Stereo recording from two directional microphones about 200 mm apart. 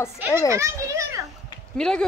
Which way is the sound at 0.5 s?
15° right (ahead or behind).